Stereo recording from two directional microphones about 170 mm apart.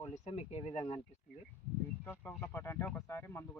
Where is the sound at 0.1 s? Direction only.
35° left (ahead or behind).